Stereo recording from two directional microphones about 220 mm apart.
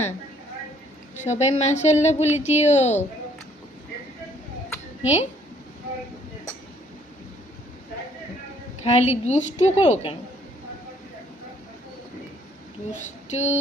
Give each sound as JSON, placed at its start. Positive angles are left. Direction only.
{"t": 1.1, "sound": "a woman's voice", "side_deg": 30}
{"t": 2.2, "sound": "speech", "side_deg": -10}
{"t": 2.5, "sound": "a woman's voice", "side_deg": 30}
{"t": 5.0, "sound": "a woman's voice", "side_deg": 30}
{"t": 8.8, "sound": "a woman's voice", "side_deg": 30}
{"t": 13.0, "sound": "a sound", "side_deg": 30}